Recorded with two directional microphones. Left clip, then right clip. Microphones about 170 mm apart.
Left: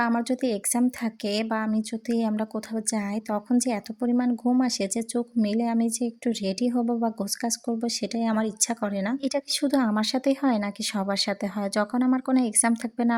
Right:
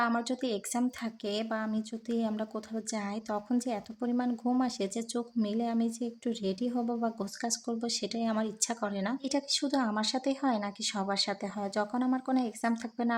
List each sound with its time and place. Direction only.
0.0 s speech: 30° left (ahead or behind)